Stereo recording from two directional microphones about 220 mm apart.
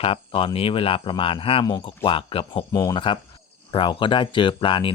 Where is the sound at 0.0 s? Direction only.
25° left (ahead or behind).